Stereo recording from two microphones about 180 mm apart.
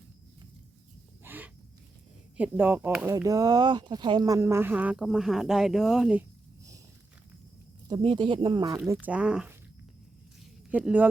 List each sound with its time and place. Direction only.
1.2 s a sound: 10° right (ahead or behind)
2.4 s speech: 10° right (ahead or behind)
7.9 s speech: 25° right (ahead or behind)
8.9 s speech: 10° right (ahead or behind)
10.7 s speech: 10° right (ahead or behind)